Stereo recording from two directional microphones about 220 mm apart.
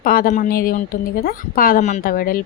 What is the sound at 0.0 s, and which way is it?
A woman's voice, 40° left (ahead or behind).